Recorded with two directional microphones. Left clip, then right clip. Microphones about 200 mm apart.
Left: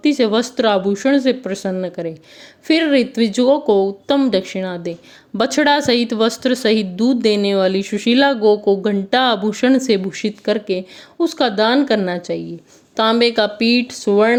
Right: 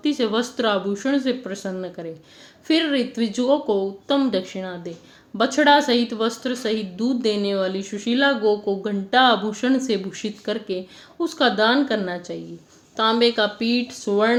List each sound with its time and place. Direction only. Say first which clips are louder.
0.0 s speech: left 6 dB; 35° left (ahead or behind)